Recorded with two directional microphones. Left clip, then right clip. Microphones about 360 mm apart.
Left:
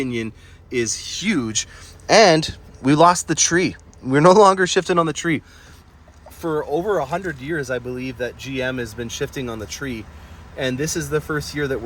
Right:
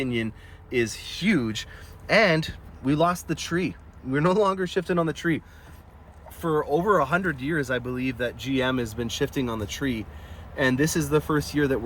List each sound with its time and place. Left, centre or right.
0.7 s speech: centre; by 5.4 s left
6.5 s speech: centre